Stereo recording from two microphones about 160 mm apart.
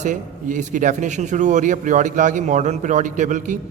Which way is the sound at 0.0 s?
55° right (ahead or behind).